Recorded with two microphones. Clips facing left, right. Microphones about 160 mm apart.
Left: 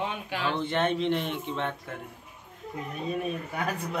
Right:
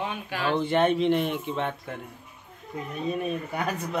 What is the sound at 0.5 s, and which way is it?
Speech, 5° right (ahead or behind).